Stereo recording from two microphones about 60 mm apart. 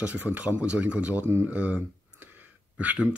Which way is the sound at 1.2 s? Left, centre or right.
Right.